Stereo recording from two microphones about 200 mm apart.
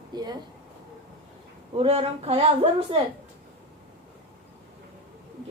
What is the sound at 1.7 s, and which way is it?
Speech, 30° right (ahead or behind).